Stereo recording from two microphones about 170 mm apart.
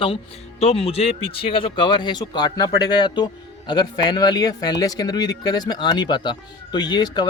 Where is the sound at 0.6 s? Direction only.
35° left (ahead or behind).